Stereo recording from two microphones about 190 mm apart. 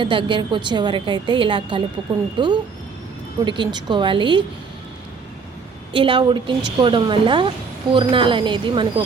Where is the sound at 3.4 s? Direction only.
25° right (ahead or behind).